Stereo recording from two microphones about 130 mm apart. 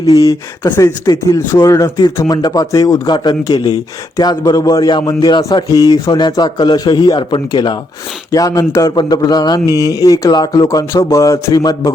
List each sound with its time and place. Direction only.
0.0 s a man's voice: 25° left (ahead or behind)